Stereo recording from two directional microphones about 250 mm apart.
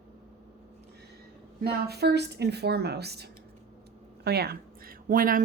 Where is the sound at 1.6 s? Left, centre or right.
Right.